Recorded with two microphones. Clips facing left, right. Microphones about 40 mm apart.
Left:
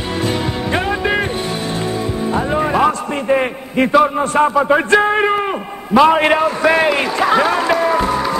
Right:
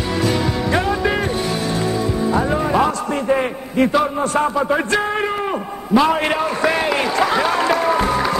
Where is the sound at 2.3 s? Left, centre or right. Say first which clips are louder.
Left 2 dB; left.